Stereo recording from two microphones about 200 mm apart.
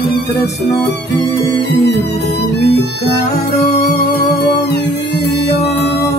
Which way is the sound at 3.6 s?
35° left (ahead or behind).